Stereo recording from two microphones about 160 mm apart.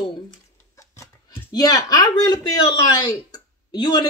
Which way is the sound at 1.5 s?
25° left (ahead or behind).